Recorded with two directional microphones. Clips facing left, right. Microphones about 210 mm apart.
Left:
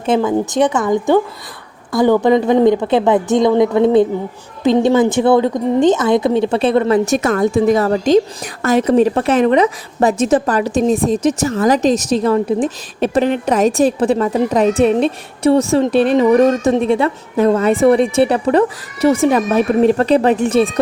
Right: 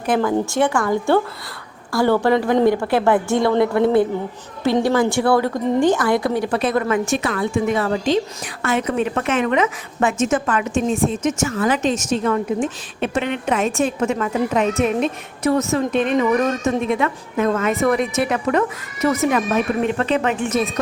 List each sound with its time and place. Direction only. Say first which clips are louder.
0.0 s a woman's voice: left 4 dB; 20° left (ahead or behind)